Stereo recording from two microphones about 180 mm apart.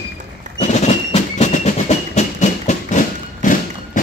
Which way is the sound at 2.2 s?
40° left (ahead or behind).